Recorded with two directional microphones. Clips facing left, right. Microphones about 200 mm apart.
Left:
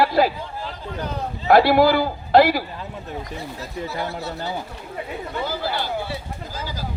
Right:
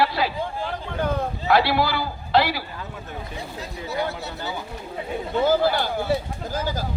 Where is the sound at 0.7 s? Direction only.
55° right (ahead or behind).